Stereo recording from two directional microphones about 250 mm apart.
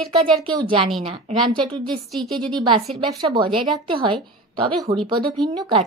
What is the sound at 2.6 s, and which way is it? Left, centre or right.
A woman's voice, centre.